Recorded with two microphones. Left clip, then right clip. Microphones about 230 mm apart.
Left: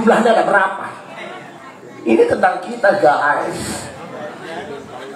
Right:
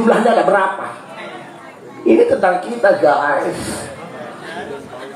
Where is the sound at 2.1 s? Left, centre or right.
Left.